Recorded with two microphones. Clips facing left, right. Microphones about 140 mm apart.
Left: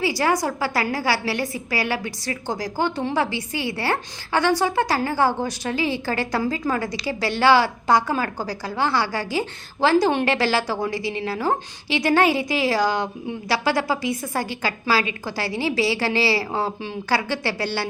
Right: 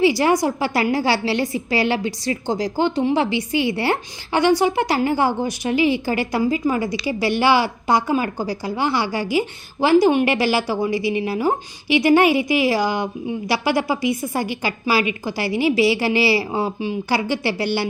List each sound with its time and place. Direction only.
0.0 s a woman's voice: 20° right (ahead or behind)